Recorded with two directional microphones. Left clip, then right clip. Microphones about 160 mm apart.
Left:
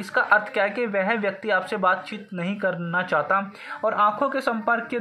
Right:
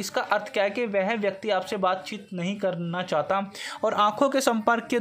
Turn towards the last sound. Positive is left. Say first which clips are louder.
# even
turn(degrees=-90)